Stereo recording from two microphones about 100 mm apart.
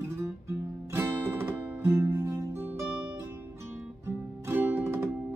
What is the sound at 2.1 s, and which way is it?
Music, 30° right (ahead or behind).